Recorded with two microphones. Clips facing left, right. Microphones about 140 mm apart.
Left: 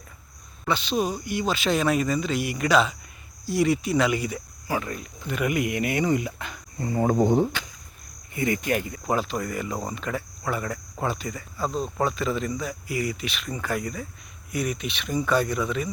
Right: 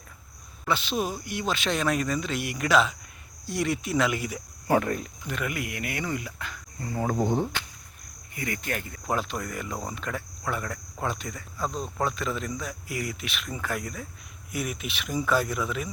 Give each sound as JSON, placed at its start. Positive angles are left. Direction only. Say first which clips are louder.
{"t": 0.6, "sound": "speech", "louder": "left 3 dB", "side_deg": 0}
{"t": 4.7, "sound": "speech", "louder": "right 5 dB", "side_deg": -50}
{"t": 5.5, "sound": "speech", "louder": "left 8 dB", "side_deg": 20}
{"t": 9.0, "sound": "speech", "louder": "left 2 dB", "side_deg": 0}